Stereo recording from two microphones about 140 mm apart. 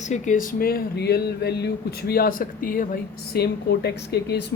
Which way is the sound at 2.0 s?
90° left.